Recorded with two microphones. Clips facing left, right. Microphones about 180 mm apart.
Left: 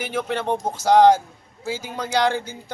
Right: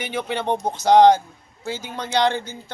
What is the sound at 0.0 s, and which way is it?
Speech, centre (ahead or behind).